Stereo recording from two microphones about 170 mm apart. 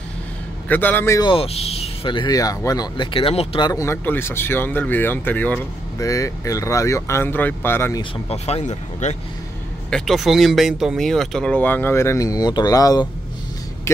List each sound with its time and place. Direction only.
0.7 s speech: 10° left (ahead or behind)
1.3 s speech: 35° left (ahead or behind)
3.7 s speech: 15° left (ahead or behind)
8.0 s speech: 35° left (ahead or behind)
9.8 s speech: 5° left (ahead or behind)